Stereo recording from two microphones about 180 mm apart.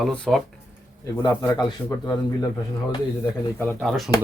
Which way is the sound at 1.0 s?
20° left (ahead or behind).